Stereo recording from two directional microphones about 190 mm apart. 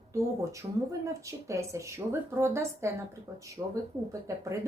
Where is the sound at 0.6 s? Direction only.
25° right (ahead or behind).